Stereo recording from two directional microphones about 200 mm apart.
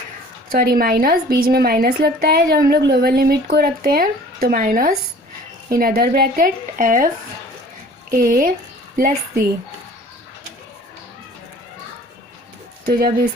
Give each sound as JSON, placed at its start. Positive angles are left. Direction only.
{"t": 0.5, "sound": "a woman's voice", "side_deg": -50}
{"t": 8.1, "sound": "a woman's voice", "side_deg": -45}
{"t": 12.8, "sound": "a woman's voice", "side_deg": -50}